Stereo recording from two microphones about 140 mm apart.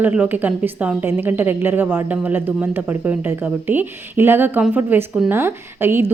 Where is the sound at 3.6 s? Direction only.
15° right (ahead or behind).